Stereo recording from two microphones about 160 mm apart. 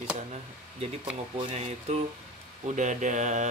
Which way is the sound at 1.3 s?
40° right (ahead or behind).